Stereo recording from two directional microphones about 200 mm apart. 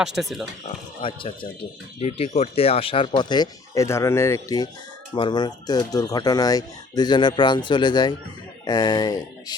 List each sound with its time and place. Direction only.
0.0 s speech: centre (ahead or behind)
1.0 s speech: 25° left (ahead or behind)